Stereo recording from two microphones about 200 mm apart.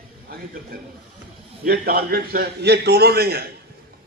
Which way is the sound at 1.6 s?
45° right (ahead or behind).